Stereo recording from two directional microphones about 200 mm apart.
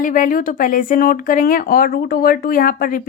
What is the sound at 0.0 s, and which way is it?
A woman's voice, 40° left (ahead or behind).